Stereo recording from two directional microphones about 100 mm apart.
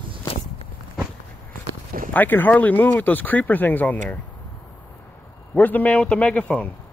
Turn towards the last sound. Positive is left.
turn(degrees=15)  # may be behind; listen again after turning